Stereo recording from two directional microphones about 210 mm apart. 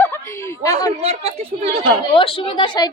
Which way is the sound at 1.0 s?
30° right (ahead or behind).